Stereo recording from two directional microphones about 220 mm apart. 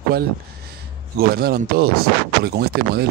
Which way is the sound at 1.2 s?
45° right (ahead or behind).